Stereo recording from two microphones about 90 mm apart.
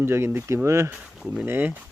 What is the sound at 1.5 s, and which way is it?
Speech, 25° right (ahead or behind).